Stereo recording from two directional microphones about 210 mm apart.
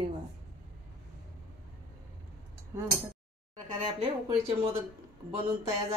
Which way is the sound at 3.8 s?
25° right (ahead or behind).